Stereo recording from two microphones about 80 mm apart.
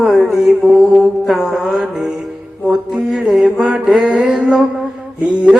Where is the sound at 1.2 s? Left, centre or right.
Centre.